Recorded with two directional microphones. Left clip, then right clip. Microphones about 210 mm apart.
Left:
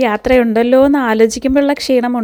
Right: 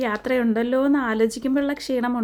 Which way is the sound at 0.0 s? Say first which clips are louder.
Left 11 dB; 35° left (ahead or behind).